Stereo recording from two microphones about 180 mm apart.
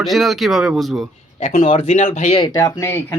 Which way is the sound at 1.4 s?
40° left (ahead or behind).